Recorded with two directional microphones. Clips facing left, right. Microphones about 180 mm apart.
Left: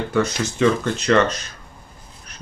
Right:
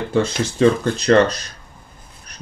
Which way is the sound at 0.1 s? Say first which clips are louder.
Right 3 dB; 30° right (ahead or behind).